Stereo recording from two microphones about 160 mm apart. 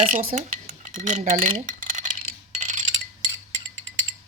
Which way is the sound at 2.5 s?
50° right (ahead or behind).